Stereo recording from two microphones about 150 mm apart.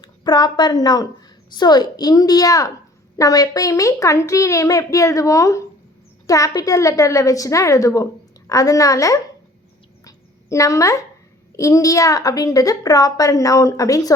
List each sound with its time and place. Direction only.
0.0 s a woman's voice: 30° left (ahead or behind)
10.0 s a sound: 20° left (ahead or behind)
11.5 s a woman's voice: 20° left (ahead or behind)